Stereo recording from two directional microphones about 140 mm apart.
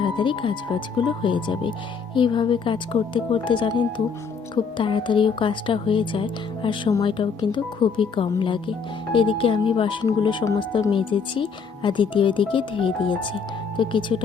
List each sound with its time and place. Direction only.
0.0 s speech: 35° left (ahead or behind)